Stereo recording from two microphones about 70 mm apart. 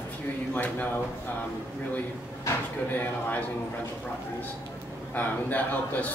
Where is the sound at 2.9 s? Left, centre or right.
Left.